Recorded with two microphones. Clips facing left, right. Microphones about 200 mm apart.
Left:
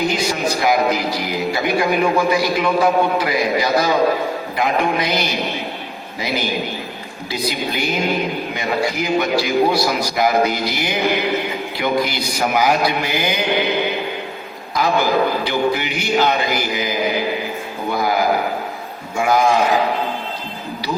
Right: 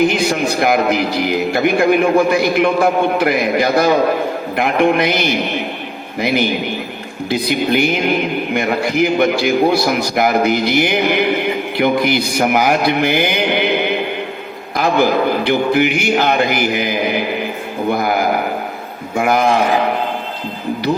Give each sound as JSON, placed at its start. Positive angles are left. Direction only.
{"t": 0.1, "sound": "a man's voice", "side_deg": -55}